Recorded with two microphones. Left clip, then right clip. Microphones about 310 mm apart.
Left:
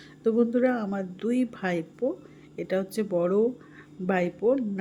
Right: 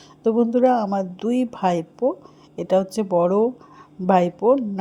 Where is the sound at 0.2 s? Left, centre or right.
Centre.